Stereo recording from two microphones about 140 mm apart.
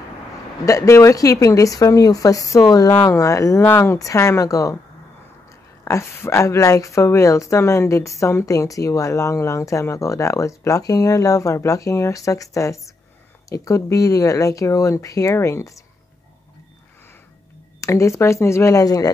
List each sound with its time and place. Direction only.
0.7 s speech: 20° left (ahead or behind)
5.9 s speech: 20° left (ahead or behind)
17.7 s speech: 20° left (ahead or behind)